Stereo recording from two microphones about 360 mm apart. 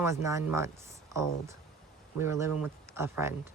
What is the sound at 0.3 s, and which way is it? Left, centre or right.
Speech, centre.